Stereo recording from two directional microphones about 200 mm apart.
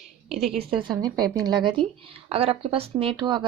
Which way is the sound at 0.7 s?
20° right (ahead or behind).